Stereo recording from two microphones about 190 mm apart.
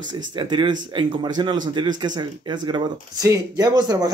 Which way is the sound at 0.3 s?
25° right (ahead or behind).